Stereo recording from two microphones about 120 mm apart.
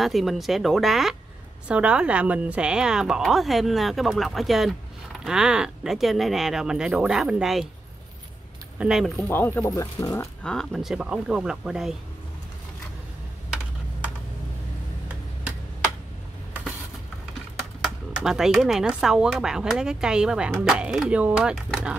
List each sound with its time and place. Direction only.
0.0 s a woman's voice: centre (ahead or behind)
8.7 s speech: 5° right (ahead or behind)
9.1 s speech: 20° left (ahead or behind)
10.4 s a woman's voice: 5° left (ahead or behind)
17.8 s a woman's voice: 5° right (ahead or behind)